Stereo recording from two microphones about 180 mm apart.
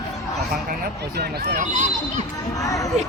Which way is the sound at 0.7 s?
65° right (ahead or behind).